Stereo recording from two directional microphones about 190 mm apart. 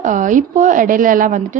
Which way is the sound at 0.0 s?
40° right (ahead or behind).